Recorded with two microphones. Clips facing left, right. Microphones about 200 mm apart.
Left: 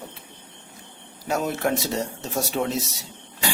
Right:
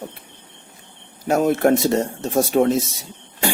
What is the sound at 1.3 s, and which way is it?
Speech, 50° right (ahead or behind).